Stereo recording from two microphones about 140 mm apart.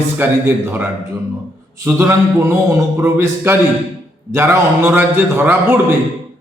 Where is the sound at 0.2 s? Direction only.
15° right (ahead or behind).